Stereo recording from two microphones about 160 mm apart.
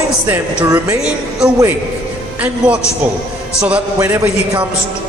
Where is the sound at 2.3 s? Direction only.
10° right (ahead or behind).